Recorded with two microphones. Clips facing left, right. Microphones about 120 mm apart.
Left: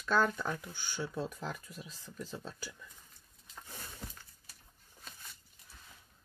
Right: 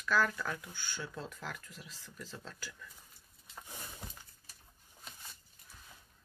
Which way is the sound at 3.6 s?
15° right (ahead or behind).